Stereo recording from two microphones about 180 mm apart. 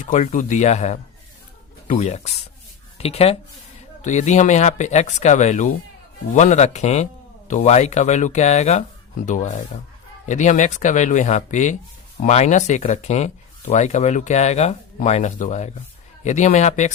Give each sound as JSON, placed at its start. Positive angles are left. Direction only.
{"t": 0.0, "sound": "speech", "side_deg": 45}
{"t": 2.0, "sound": "speech", "side_deg": 40}